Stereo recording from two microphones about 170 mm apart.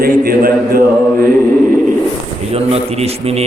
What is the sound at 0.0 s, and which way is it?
Speech, 60° right (ahead or behind).